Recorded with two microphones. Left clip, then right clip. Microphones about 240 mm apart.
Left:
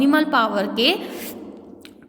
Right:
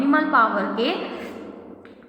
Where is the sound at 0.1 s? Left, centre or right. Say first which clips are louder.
Even; left.